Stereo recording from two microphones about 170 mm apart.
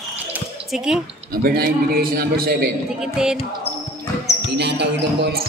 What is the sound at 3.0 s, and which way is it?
Music, 5° right (ahead or behind).